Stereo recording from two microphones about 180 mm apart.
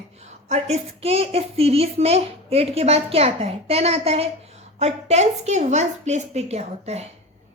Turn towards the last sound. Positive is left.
turn(degrees=-35)  # may be behind; listen again after turning